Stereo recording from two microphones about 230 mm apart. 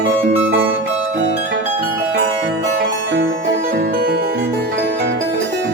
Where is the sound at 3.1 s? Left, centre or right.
Right.